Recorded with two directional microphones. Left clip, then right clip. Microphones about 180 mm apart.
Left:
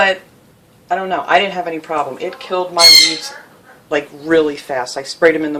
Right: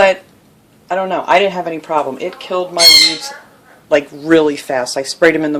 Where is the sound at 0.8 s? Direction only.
45° right (ahead or behind).